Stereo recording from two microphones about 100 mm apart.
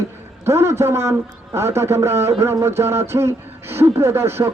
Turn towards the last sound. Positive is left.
turn(degrees=-25)  # may be behind; listen again after turning